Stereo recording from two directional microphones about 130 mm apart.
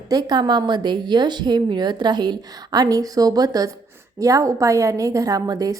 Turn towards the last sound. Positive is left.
turn(degrees=-30)  # may be behind; listen again after turning